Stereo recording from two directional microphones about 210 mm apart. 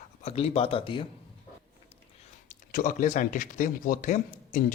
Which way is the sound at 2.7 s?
40° left (ahead or behind).